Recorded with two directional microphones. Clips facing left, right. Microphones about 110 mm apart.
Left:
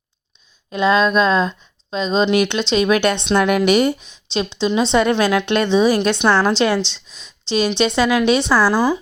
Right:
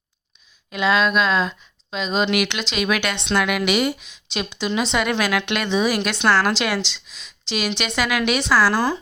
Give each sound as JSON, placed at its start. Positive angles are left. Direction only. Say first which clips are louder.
{"t": 0.7, "sound": "a woman's voice", "louder": "left 4 dB", "side_deg": 30}